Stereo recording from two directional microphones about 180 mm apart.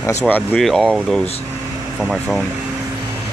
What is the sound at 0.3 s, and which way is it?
Speech, centre (ahead or behind).